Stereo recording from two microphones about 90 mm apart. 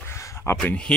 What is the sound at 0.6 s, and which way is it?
Speech, 15° left (ahead or behind).